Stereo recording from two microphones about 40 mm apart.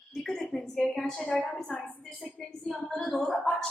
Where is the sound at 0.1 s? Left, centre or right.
Centre.